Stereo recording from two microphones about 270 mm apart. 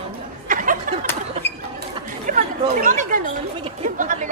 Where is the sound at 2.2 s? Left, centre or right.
Right.